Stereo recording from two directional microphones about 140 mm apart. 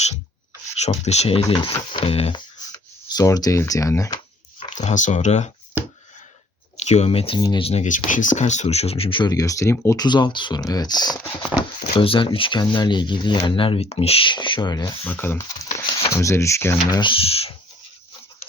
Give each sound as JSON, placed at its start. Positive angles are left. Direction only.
{"t": 0.8, "sound": "speech", "side_deg": 50}
{"t": 2.7, "sound": "speech", "side_deg": 25}
{"t": 4.7, "sound": "speech", "side_deg": 60}
{"t": 6.7, "sound": "speech", "side_deg": 50}
{"t": 7.3, "sound": "speech", "side_deg": 30}
{"t": 7.6, "sound": "speech", "side_deg": 45}
{"t": 7.9, "sound": "speech", "side_deg": 65}
{"t": 9.3, "sound": "speech", "side_deg": 25}
{"t": 10.1, "sound": "speech", "side_deg": 35}
{"t": 11.5, "sound": "speech", "side_deg": -15}
{"t": 11.9, "sound": "speech", "side_deg": 40}
{"t": 15.0, "sound": "speech", "side_deg": 15}
{"t": 16.9, "sound": "speech", "side_deg": 35}